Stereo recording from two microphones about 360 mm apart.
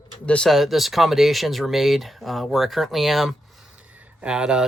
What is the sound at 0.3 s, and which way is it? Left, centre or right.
Speech, centre.